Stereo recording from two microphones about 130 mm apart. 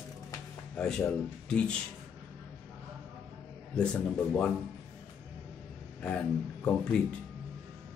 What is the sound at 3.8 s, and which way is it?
Speech, 5° left (ahead or behind).